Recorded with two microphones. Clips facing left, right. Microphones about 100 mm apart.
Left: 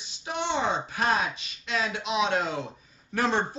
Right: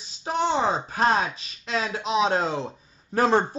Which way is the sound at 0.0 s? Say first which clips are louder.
Right 6 dB; 35° right (ahead or behind).